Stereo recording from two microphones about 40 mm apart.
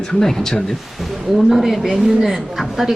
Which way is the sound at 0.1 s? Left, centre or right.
Centre.